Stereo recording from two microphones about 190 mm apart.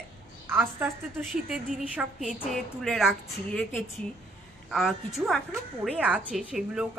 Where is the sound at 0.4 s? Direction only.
10° right (ahead or behind).